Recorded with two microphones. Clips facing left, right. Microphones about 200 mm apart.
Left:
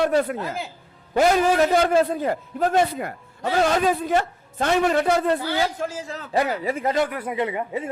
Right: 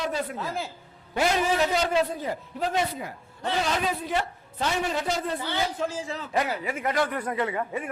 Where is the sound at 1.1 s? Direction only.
50° left (ahead or behind).